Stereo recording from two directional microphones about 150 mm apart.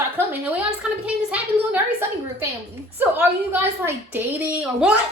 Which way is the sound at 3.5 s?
15° right (ahead or behind).